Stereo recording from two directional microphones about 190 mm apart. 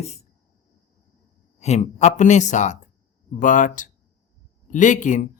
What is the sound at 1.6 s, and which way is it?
Speech, 35° left (ahead or behind).